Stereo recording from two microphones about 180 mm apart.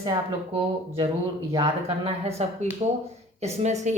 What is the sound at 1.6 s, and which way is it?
Speech, 35° right (ahead or behind).